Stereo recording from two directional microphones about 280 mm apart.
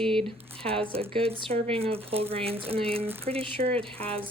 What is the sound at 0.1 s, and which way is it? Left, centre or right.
Speech, centre.